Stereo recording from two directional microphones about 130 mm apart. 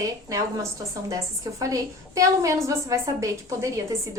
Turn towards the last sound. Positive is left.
turn(degrees=-25)  # may be behind; listen again after turning